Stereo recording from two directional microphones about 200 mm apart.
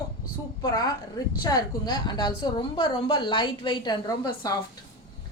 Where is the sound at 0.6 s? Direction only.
20° left (ahead or behind).